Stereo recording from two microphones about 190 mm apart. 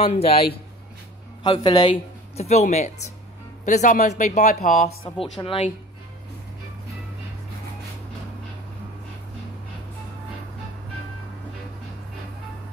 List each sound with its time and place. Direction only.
0.0 s speech: 30° left (ahead or behind)
5.2 s speech: 30° left (ahead or behind)